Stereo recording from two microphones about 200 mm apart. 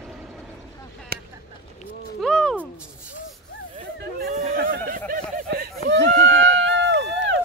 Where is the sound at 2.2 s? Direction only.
5° left (ahead or behind).